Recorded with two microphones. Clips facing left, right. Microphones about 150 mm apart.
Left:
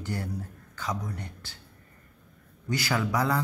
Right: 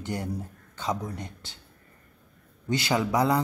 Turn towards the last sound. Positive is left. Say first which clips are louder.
# right 3 dB
turn(degrees=-20)  # may be behind; listen again after turning